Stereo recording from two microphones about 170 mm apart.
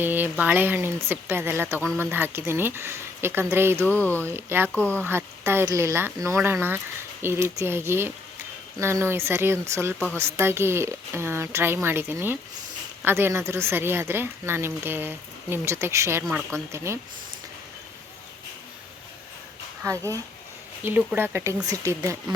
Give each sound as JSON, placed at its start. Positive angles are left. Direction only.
{"t": 0.0, "sound": "a woman's voice", "side_deg": -10}
{"t": 4.0, "sound": "speech", "side_deg": 10}
{"t": 4.4, "sound": "a woman's voice", "side_deg": -15}
{"t": 4.7, "sound": "speech", "side_deg": 10}
{"t": 5.0, "sound": "a woman's voice", "side_deg": -15}
{"t": 19.8, "sound": "a woman's voice", "side_deg": -15}